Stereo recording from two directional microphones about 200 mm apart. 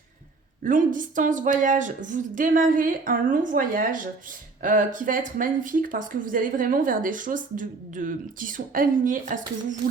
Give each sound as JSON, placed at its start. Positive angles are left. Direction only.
{"t": 0.6, "sound": "speech", "side_deg": -40}